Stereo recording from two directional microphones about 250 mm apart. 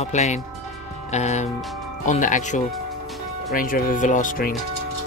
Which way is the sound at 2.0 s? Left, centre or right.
Left.